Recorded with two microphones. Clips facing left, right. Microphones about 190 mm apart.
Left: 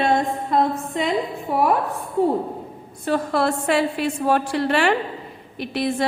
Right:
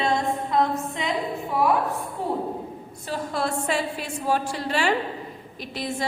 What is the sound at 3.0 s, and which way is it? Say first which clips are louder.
A woman's voice: left 7 dB; 65° left (ahead or behind).